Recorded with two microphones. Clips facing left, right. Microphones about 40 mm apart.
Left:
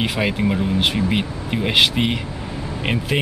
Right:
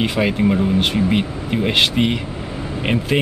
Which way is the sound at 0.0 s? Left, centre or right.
Centre.